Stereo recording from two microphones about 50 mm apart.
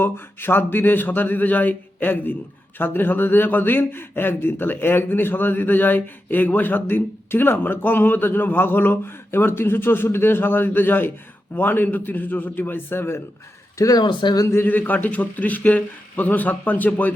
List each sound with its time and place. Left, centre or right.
0.0 s a man's voice: left
14.6 s a man's voice: left